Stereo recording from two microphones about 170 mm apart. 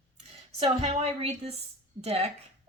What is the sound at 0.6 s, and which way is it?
A woman's voice, 35° right (ahead or behind).